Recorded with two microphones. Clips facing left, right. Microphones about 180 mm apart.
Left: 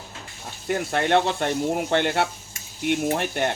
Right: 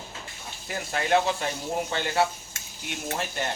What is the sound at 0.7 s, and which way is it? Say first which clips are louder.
Speech: left 4 dB; 60° left (ahead or behind).